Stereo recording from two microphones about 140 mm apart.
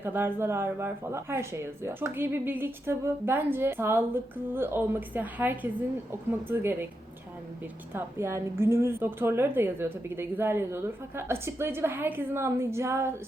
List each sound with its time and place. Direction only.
0.0 s speech: 15° right (ahead or behind)
7.9 s speech: 15° right (ahead or behind)